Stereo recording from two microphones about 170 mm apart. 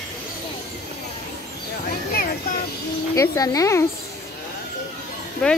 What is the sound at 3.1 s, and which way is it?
Speech, 20° left (ahead or behind).